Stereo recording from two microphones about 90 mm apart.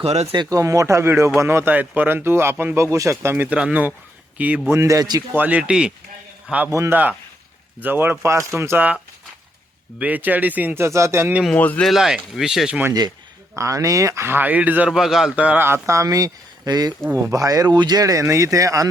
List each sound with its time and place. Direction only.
0.0 s speech: 90° right
0.5 s speech: 40° right (ahead or behind); by 4.6 s 15° right (ahead or behind)
4.7 s speech: 35° right (ahead or behind)
5.3 s speech: 15° right (ahead or behind)
6.7 s speech: 35° right (ahead or behind)
6.9 s speech: 20° right (ahead or behind)
10.0 s speech: 20° right (ahead or behind)
10.8 s speech: 30° right (ahead or behind)
11.5 s speech: 20° left (ahead or behind)
11.9 s speech: 5° right (ahead or behind)
13.6 s speech: 35° right (ahead or behind); by 14.8 s 15° right (ahead or behind)
14.8 s speech: 5° right (ahead or behind)
15.4 s speech: 15° right (ahead or behind)
15.6 s speech: 30° right (ahead or behind)